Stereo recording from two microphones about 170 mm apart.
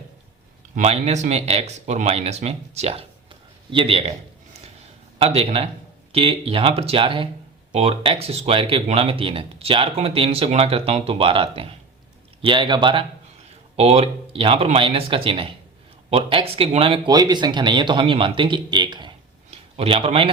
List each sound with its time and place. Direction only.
0.8 s speech: 40° right (ahead or behind)
5.2 s speech: 35° right (ahead or behind)